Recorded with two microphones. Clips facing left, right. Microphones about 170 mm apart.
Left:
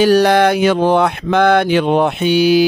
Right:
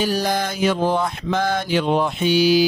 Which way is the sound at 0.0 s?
70° left (ahead or behind).